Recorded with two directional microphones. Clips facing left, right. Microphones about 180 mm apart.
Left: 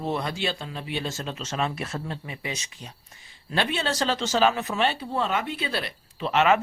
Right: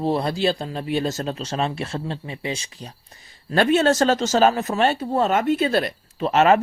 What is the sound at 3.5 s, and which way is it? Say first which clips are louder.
Speech: right 10 dB; 45° right (ahead or behind).